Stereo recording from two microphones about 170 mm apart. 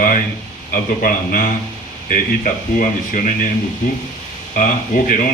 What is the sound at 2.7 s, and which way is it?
Speech, 50° left (ahead or behind).